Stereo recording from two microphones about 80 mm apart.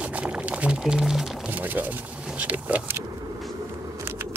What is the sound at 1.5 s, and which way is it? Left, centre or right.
Speech, right.